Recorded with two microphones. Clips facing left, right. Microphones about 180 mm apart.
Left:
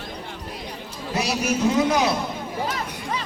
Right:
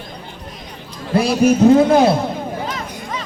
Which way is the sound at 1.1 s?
50° right (ahead or behind).